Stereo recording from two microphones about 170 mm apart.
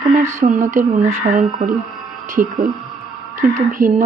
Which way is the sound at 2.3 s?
50° right (ahead or behind).